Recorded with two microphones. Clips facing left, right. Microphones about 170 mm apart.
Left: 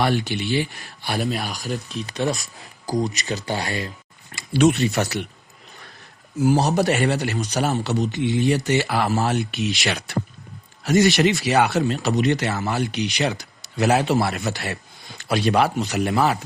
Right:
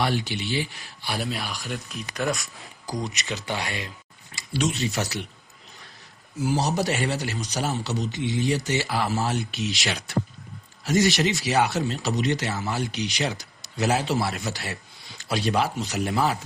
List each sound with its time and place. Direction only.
0.0 s speech: 55° left (ahead or behind); by 2.0 s 40° left (ahead or behind)
2.1 s speech: 30° left (ahead or behind)
4.4 s speech: 60° left (ahead or behind)
6.4 s speech: 55° left (ahead or behind)